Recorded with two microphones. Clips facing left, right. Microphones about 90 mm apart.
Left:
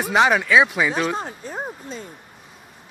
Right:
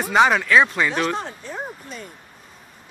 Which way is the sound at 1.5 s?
30° left (ahead or behind).